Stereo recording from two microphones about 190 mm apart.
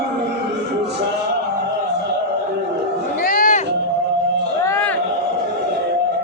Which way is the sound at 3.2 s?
45° left (ahead or behind).